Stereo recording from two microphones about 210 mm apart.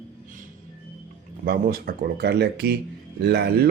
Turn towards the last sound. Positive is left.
turn(degrees=-50)  # may be behind; listen again after turning